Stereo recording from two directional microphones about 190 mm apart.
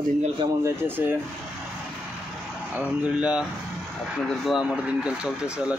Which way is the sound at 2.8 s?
5° right (ahead or behind).